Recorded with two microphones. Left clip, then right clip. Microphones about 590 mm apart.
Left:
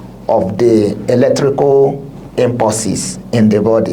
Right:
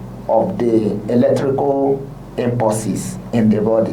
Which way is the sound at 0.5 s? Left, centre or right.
Left.